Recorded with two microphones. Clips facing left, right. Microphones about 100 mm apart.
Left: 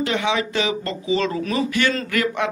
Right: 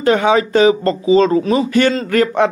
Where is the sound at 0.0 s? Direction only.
45° right (ahead or behind).